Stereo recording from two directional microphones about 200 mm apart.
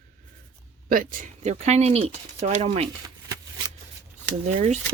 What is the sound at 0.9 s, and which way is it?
Speech, 45° right (ahead or behind).